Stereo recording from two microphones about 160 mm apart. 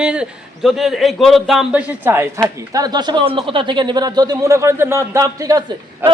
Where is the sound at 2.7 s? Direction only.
25° right (ahead or behind).